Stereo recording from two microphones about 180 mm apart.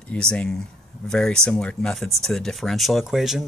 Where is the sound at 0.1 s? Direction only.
5° left (ahead or behind).